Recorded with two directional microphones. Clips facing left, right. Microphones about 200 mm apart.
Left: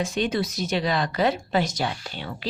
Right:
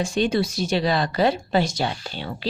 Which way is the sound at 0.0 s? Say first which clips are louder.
Right 3 dB; 30° right (ahead or behind).